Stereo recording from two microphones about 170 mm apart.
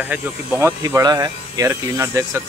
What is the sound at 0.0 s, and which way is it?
Speech, 10° right (ahead or behind).